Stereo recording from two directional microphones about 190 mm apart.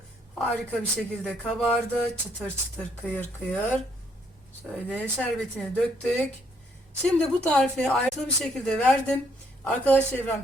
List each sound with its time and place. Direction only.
0.3 s a man's voice: centre (ahead or behind)
7.4 s a man's voice: 5° left (ahead or behind)